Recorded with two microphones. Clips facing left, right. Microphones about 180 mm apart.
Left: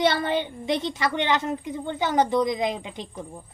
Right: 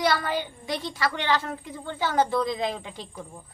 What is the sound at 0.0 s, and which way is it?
A woman's voice, 25° left (ahead or behind).